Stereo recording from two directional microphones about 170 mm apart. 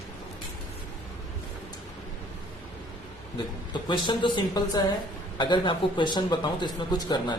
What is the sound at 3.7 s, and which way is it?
A man's voice, 25° left (ahead or behind).